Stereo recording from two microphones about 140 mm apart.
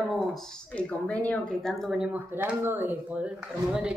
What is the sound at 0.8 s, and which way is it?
Speech, 10° left (ahead or behind).